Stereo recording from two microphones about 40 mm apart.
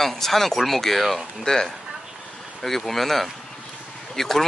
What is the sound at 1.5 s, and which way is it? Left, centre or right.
Speech, centre.